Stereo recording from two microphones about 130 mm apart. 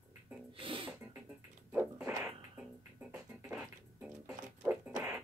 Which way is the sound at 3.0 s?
10° right (ahead or behind).